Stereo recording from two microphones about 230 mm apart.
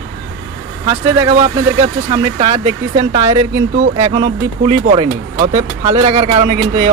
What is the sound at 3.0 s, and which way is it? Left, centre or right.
Speech, centre.